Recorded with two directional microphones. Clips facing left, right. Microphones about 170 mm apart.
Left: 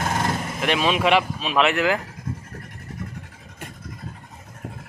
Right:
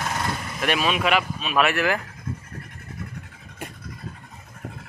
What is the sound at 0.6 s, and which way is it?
Speech, 25° left (ahead or behind).